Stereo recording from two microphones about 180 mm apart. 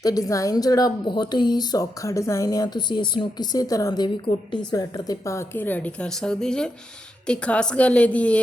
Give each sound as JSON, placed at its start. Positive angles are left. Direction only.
{"t": 0.0, "sound": "a woman's voice", "side_deg": 20}